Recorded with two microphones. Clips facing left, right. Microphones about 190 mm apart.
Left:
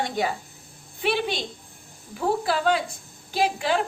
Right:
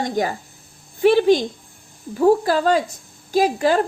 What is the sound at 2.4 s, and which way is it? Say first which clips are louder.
A woman's voice: right 5 dB; 40° right (ahead or behind).